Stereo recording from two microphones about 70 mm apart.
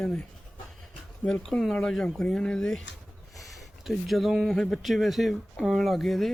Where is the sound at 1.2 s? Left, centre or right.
Centre.